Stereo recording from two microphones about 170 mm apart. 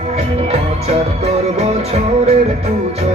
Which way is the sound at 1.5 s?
40° right (ahead or behind).